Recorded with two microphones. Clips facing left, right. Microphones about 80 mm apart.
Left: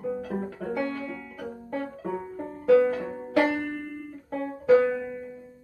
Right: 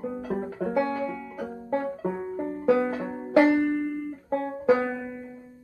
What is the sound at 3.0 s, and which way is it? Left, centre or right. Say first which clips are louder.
Banjo: right 4 dB; centre.